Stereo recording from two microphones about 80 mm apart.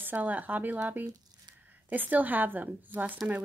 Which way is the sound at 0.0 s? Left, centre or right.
Right.